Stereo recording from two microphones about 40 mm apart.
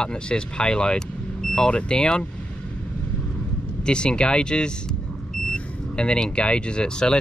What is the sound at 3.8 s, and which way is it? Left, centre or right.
Speech, left.